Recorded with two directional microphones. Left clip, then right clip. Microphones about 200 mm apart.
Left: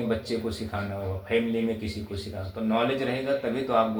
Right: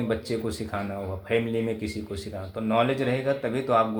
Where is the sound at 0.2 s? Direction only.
50° right (ahead or behind).